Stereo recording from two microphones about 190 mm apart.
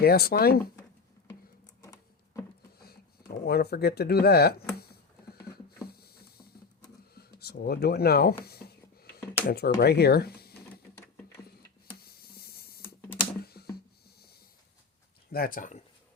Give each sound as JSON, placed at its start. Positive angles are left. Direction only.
{"t": 0.0, "sound": "speech", "side_deg": 55}
{"t": 1.8, "sound": "a sound", "side_deg": 15}
{"t": 2.7, "sound": "a sound", "side_deg": 55}
{"t": 5.9, "sound": "patter", "side_deg": 55}
{"t": 7.2, "sound": "speech", "side_deg": 55}
{"t": 8.4, "sound": "a sound", "side_deg": 55}
{"t": 9.5, "sound": "speech", "side_deg": 55}
{"t": 11.9, "sound": "hiss", "side_deg": 55}
{"t": 12.8, "sound": "computer keyboard", "side_deg": 10}
{"t": 13.4, "sound": "computer keyboard", "side_deg": 55}
{"t": 15.3, "sound": "speech", "side_deg": 50}